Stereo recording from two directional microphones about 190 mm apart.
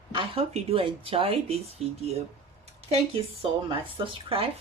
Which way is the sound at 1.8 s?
Centre (ahead or behind).